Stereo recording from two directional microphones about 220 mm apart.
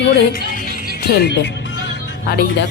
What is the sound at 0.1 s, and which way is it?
Music, 40° left (ahead or behind).